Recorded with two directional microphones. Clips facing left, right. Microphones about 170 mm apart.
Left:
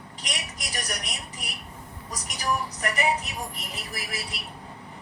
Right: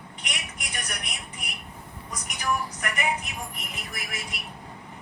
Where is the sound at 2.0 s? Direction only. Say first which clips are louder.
Even; 35° left (ahead or behind).